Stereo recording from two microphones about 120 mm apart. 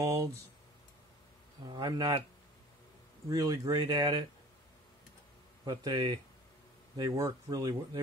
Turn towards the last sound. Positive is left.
turn(degrees=-30)  # may be behind; listen again after turning